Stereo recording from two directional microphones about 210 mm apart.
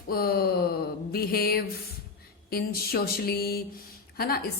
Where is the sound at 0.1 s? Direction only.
45° left (ahead or behind).